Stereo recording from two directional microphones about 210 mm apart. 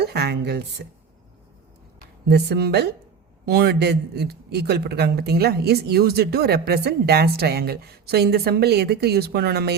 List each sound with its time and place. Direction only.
0.0 s speech: 50° right (ahead or behind)
2.2 s speech: 50° right (ahead or behind)